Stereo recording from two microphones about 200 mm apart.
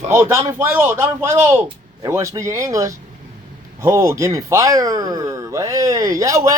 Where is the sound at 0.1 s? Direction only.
15° right (ahead or behind).